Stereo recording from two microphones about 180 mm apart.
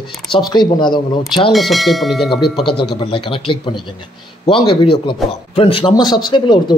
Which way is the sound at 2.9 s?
30° left (ahead or behind).